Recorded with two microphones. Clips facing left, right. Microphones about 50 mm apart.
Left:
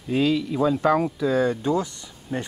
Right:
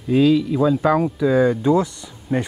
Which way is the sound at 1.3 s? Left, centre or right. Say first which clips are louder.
Right 6 dB; centre.